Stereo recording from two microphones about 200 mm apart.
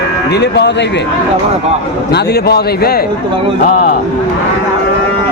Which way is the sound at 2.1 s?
55° left (ahead or behind).